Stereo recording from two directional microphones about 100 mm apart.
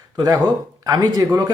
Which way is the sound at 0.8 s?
40° right (ahead or behind).